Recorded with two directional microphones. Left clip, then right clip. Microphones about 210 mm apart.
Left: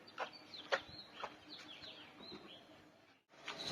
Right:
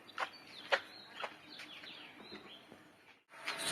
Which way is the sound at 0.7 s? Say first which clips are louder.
Right 5 dB; 45° left (ahead or behind).